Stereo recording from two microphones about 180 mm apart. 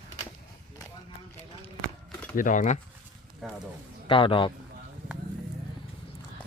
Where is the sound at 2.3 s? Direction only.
45° left (ahead or behind).